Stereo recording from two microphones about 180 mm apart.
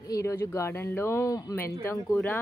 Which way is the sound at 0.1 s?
15° left (ahead or behind).